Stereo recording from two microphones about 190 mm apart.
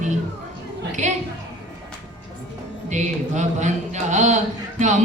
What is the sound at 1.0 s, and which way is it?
Speech, 40° right (ahead or behind).